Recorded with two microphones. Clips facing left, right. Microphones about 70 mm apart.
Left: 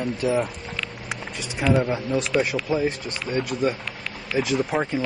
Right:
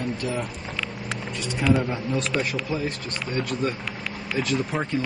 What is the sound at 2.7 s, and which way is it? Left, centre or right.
Speech, centre.